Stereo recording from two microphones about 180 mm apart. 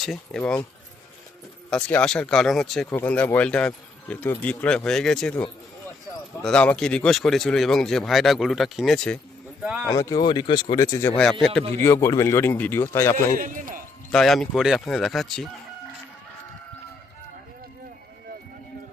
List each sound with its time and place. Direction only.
0.0 s speech: 5° left (ahead or behind)
1.7 s speech: 5° left (ahead or behind)
9.8 s speech: 15° left (ahead or behind)
13.3 s a man's voice: 50° right (ahead or behind)
14.1 s speech: centre (ahead or behind)